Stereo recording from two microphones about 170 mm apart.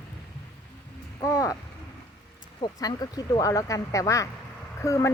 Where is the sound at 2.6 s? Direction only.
20° left (ahead or behind).